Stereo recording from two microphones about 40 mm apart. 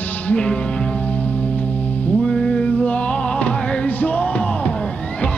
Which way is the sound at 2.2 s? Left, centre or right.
Centre.